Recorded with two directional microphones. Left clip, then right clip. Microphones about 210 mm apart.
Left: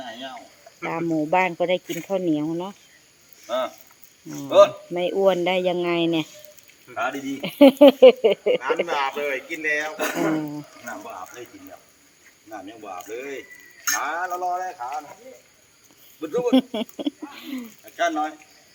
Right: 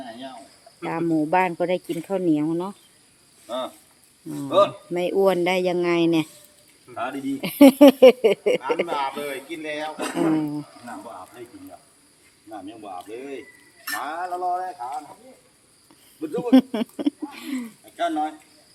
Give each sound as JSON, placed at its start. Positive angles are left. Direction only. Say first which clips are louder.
{"t": 0.8, "sound": "speech", "louder": "right 1 dB", "side_deg": 0}
{"t": 9.0, "sound": "speech", "louder": "left 3 dB", "side_deg": -35}
{"t": 10.0, "sound": "speech", "louder": "even", "side_deg": -10}
{"t": 12.5, "sound": "speech", "louder": "even", "side_deg": -15}
{"t": 16.2, "sound": "speech", "louder": "right 1 dB", "side_deg": -5}